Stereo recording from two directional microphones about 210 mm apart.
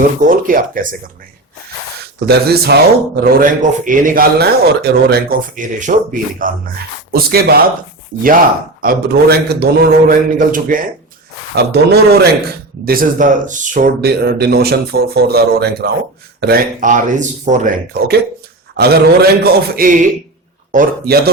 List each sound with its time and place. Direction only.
0.2 s speech: 40° right (ahead or behind)
2.2 s speech: 50° right (ahead or behind)
8.8 s speech: 45° right (ahead or behind)
18.8 s speech: 50° right (ahead or behind)